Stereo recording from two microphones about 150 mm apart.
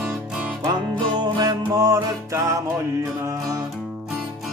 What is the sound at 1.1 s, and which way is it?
Music, 30° right (ahead or behind).